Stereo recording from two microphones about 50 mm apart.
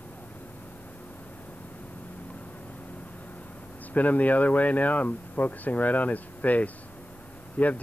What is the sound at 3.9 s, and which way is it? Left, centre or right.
Speech, left.